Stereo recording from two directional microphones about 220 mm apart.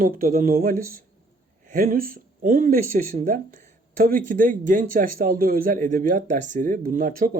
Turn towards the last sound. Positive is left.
turn(degrees=-40)  # may be behind; listen again after turning